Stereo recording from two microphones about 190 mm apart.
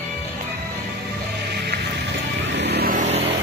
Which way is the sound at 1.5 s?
60° right (ahead or behind).